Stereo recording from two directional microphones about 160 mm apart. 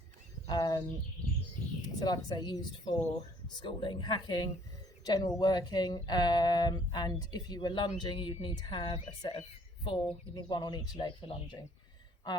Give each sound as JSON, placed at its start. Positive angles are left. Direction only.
{"t": 0.4, "sound": "speech", "side_deg": 25}
{"t": 2.0, "sound": "speech", "side_deg": 25}